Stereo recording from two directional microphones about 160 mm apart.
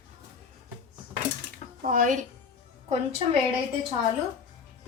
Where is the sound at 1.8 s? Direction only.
55° right (ahead or behind).